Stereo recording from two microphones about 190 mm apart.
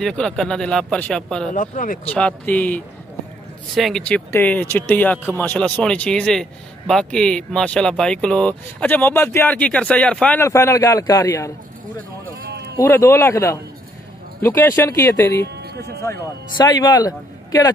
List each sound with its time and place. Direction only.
0.0 s speech: 5° left (ahead or behind)
1.5 s speech: 45° left (ahead or behind)
2.0 s speech: 5° left (ahead or behind)
12.4 s bleat: 55° right (ahead or behind)
12.8 s speech: 15° left (ahead or behind)
15.4 s speech: 60° right (ahead or behind)
16.0 s a man's voice: 20° left (ahead or behind)